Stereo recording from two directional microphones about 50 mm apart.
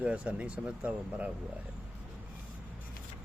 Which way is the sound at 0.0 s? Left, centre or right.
Right.